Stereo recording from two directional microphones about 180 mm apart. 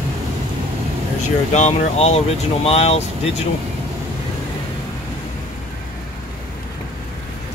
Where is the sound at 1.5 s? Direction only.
40° left (ahead or behind).